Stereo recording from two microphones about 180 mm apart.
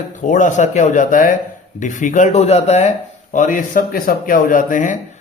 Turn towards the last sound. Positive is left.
turn(degrees=45)  # may be behind; listen again after turning